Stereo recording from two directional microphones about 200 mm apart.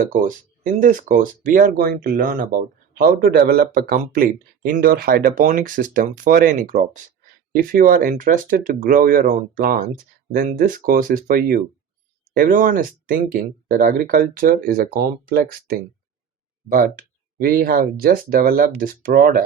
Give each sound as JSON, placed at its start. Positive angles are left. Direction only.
{"t": 0.1, "sound": "speech", "side_deg": -40}